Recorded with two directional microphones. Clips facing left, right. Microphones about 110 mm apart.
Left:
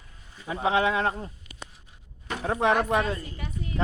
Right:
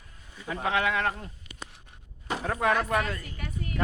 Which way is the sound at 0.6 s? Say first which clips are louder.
Left 3 dB; 25° left (ahead or behind).